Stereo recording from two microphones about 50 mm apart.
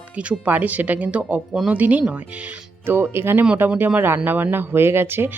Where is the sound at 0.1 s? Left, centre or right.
Right.